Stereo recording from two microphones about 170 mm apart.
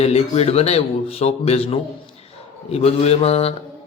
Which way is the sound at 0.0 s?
40° left (ahead or behind).